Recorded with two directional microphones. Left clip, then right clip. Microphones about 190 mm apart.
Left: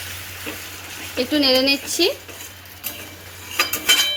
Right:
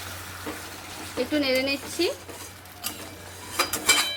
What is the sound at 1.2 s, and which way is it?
Speech, 55° left (ahead or behind).